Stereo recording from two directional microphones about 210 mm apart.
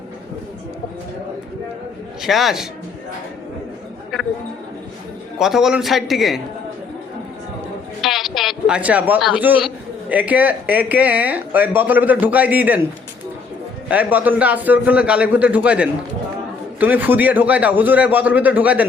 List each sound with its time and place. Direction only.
2.2 s a man's voice: centre (ahead or behind)
5.4 s a man's voice: centre (ahead or behind)
8.0 s speech: centre (ahead or behind)
13.8 s a man's voice: 5° right (ahead or behind)